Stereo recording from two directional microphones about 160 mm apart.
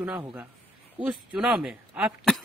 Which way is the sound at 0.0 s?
10° right (ahead or behind).